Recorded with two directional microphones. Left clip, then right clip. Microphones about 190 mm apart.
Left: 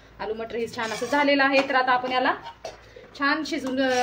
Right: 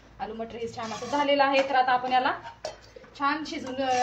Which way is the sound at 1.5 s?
25° left (ahead or behind).